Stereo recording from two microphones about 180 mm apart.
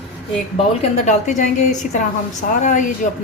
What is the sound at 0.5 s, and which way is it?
Speech, 35° left (ahead or behind).